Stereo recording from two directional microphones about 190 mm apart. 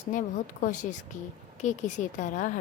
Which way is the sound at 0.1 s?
45° left (ahead or behind).